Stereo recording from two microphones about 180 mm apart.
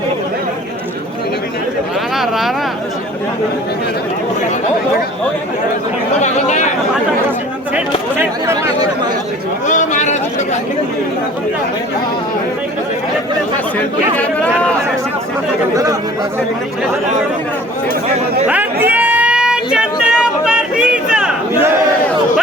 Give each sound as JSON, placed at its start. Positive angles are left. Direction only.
{"t": 2.1, "sound": "vehicle", "side_deg": 0}
{"t": 6.1, "sound": "speech", "side_deg": 40}
{"t": 8.2, "sound": "speech", "side_deg": -15}
{"t": 9.6, "sound": "a sound", "side_deg": 45}
{"t": 13.7, "sound": "speech", "side_deg": 5}
{"t": 15.7, "sound": "speech", "side_deg": -20}
{"t": 18.4, "sound": "a sound", "side_deg": -10}